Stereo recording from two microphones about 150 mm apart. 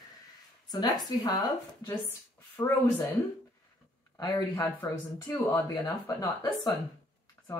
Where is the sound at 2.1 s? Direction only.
15° left (ahead or behind).